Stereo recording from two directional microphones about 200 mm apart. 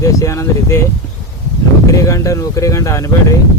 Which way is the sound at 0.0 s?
15° left (ahead or behind).